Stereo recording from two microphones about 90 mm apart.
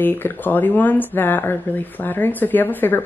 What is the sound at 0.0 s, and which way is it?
Speech, 20° left (ahead or behind).